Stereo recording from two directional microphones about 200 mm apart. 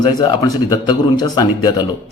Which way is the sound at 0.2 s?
20° left (ahead or behind).